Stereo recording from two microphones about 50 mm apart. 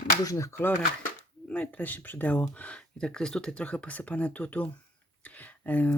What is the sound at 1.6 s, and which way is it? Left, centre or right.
Speech, left.